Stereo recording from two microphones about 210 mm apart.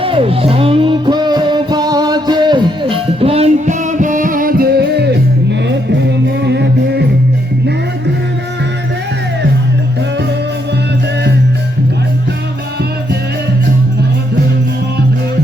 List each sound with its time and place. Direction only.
0.0 s music: 25° right (ahead or behind); by 7.1 s 55° right (ahead or behind)